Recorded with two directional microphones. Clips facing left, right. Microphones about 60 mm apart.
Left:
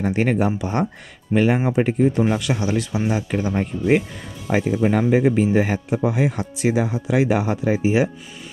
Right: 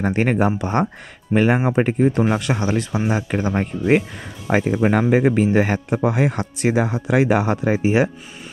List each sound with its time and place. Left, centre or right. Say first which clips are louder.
0.0 s speech: right 1 dB; right
5.1 s speech: right 1 dB; right